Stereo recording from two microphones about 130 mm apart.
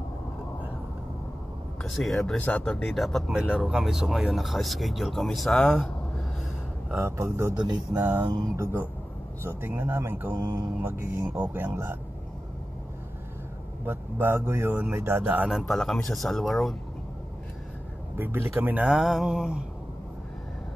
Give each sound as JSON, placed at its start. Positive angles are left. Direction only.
{"t": 1.8, "sound": "speech", "side_deg": 0}
{"t": 6.9, "sound": "speech", "side_deg": -20}
{"t": 7.5, "sound": "speech", "side_deg": -35}
{"t": 8.0, "sound": "speech", "side_deg": -15}
{"t": 9.4, "sound": "speech", "side_deg": -15}
{"t": 13.8, "sound": "speech", "side_deg": -15}
{"t": 15.5, "sound": "speech", "side_deg": 0}
{"t": 18.1, "sound": "speech", "side_deg": -15}